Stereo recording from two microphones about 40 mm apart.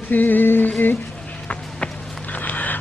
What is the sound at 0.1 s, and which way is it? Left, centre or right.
Music, left.